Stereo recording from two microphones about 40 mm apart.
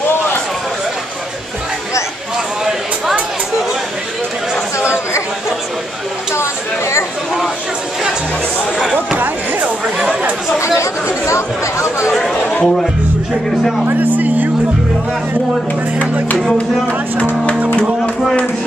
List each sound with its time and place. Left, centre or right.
12.1 s chatter: centre
12.6 s speech: centre
13.8 s speech: right
16.5 s speech: left